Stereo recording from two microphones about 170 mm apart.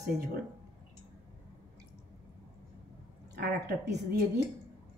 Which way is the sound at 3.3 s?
80° right.